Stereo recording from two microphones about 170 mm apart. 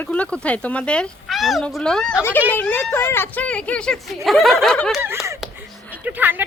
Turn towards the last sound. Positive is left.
turn(degrees=-10)  # may be behind; listen again after turning